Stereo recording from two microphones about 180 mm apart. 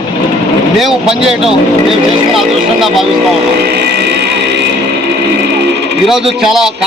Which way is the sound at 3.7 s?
65° right (ahead or behind).